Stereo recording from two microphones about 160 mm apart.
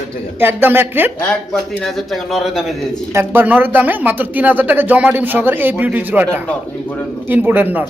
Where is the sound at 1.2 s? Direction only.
10° left (ahead or behind).